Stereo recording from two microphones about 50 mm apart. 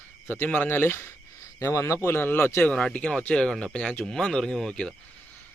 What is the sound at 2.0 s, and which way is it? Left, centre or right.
Speech, left.